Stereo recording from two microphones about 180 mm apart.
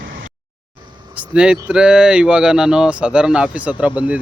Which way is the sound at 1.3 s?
5° right (ahead or behind).